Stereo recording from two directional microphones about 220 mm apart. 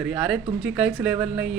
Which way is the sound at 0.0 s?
5° right (ahead or behind).